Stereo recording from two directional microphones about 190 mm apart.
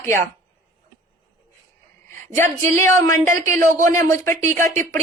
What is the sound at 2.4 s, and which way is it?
Speech, 15° left (ahead or behind).